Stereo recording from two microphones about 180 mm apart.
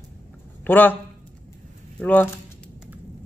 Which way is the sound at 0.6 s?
10° left (ahead or behind).